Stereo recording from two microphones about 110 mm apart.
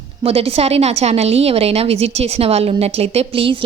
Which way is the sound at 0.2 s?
60° right (ahead or behind).